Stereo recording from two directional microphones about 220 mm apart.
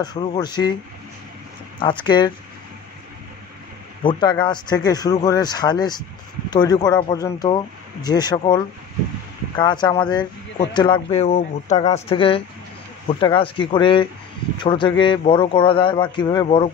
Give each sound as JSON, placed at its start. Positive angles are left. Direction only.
{"t": 0.0, "sound": "a man's voice", "side_deg": 20}
{"t": 1.8, "sound": "a man's voice", "side_deg": 20}
{"t": 4.0, "sound": "a man's voice", "side_deg": 20}